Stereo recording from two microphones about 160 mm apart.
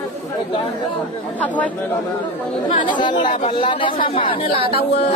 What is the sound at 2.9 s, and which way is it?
A woman's voice, 30° left (ahead or behind).